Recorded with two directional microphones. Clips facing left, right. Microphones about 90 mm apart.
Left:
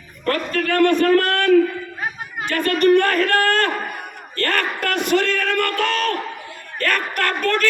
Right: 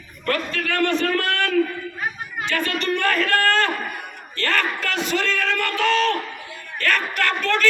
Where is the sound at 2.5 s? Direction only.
50° left (ahead or behind).